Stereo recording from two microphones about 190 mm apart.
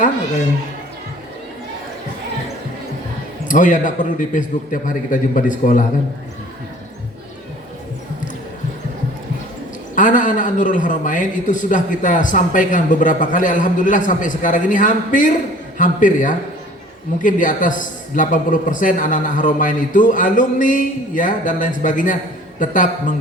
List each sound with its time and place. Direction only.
3.5 s a man's voice: 45° left (ahead or behind)
9.9 s a man's voice: 45° left (ahead or behind)